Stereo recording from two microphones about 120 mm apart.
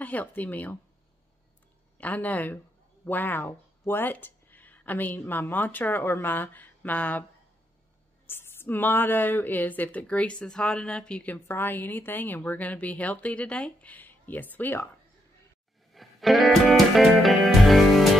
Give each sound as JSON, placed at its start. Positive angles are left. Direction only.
{"t": 0.0, "sound": "speech", "side_deg": 15}
{"t": 2.0, "sound": "speech", "side_deg": 15}
{"t": 8.3, "sound": "speech", "side_deg": 20}
{"t": 15.9, "sound": "music", "side_deg": 0}